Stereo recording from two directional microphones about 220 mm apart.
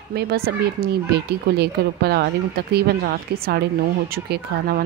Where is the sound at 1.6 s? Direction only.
45° right (ahead or behind).